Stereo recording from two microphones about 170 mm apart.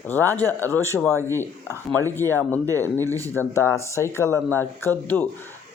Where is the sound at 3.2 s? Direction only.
15° left (ahead or behind).